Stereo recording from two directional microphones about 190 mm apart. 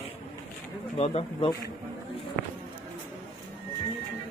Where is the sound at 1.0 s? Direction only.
30° left (ahead or behind).